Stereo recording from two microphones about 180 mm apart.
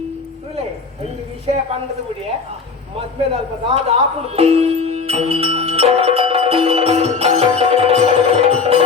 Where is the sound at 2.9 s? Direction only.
35° right (ahead or behind).